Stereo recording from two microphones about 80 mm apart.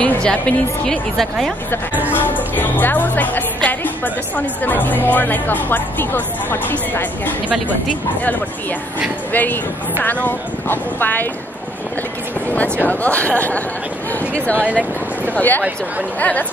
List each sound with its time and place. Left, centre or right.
0.0 s a woman's voice: centre
2.1 s speech: left
9.3 s speech: left
12.5 s a woman's voice: centre
14.7 s speech: centre
15.3 s speech: left